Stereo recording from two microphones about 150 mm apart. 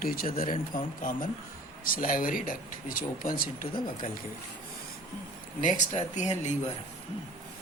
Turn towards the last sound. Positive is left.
turn(degrees=45)  # may be behind; listen again after turning